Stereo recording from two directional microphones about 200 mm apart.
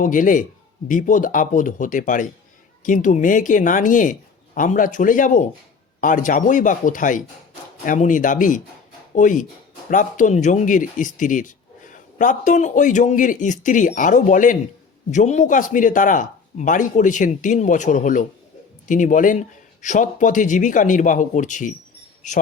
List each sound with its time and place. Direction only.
0.0 s speech: 40° left (ahead or behind)